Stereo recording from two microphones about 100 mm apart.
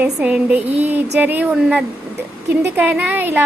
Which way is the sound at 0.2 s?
10° right (ahead or behind).